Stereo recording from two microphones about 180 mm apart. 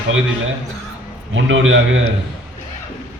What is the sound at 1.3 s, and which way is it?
Speech, 90° right.